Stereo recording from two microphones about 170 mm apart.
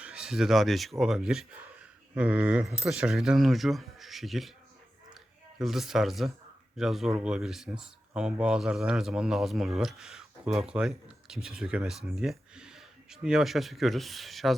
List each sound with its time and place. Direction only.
0.0 s speech: 5° right (ahead or behind)
5.5 s speech: centre (ahead or behind)